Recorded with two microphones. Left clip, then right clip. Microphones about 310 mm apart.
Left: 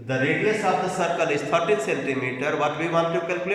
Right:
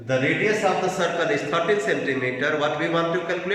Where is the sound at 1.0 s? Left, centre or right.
Centre.